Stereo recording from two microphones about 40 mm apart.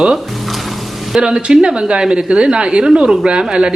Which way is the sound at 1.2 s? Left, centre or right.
Centre.